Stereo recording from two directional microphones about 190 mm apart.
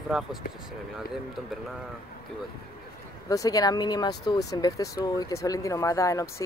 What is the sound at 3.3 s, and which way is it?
Speech, 20° left (ahead or behind).